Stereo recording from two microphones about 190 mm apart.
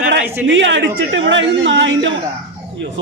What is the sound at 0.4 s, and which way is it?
A man's voice, 75° right (ahead or behind).